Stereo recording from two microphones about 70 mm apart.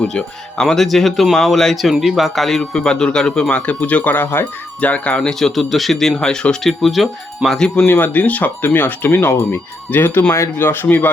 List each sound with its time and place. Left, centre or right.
0.0 s speech: centre
5.3 s speech: centre
7.9 s speech: left